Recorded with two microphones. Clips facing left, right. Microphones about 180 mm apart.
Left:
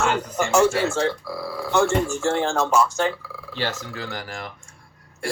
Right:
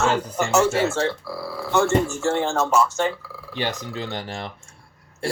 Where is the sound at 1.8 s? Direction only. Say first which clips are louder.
Right 1 dB; 10° left (ahead or behind).